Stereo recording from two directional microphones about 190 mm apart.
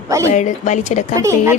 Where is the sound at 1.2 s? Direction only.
15° right (ahead or behind).